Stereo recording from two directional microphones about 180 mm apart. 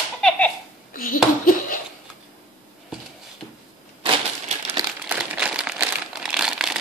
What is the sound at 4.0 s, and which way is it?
Crushing, 35° right (ahead or behind).